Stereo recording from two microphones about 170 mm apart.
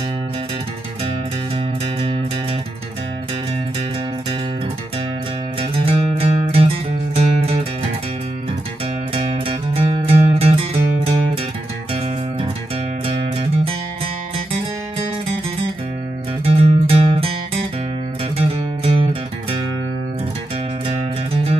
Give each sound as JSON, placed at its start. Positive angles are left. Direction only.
{"t": 5.6, "sound": "music", "side_deg": -35}
{"t": 9.1, "sound": "music", "side_deg": -35}
{"t": 13.0, "sound": "music", "side_deg": -35}
{"t": 16.4, "sound": "music", "side_deg": -35}
{"t": 18.5, "sound": "music", "side_deg": -35}